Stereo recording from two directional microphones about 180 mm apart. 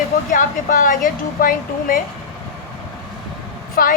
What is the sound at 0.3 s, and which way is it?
A woman's voice, 50° left (ahead or behind).